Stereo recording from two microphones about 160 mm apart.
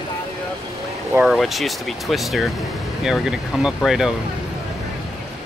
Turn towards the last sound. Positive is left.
turn(degrees=-5)  # may be behind; listen again after turning